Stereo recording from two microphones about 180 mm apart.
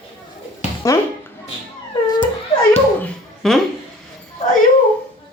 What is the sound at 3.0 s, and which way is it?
Dog, 5° left (ahead or behind).